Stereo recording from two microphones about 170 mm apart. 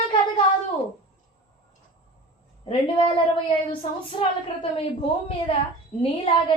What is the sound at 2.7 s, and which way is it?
A woman's voice, 30° left (ahead or behind).